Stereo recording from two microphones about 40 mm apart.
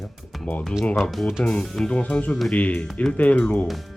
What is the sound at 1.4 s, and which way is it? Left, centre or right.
Speech, left.